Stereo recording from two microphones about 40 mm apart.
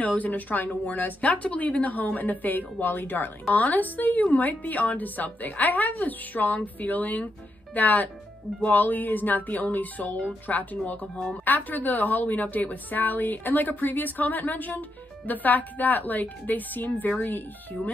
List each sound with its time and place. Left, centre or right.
0.0 s a woman's voice: left
3.5 s a woman's voice: left